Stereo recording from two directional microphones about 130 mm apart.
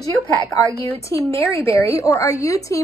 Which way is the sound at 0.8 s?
20° left (ahead or behind).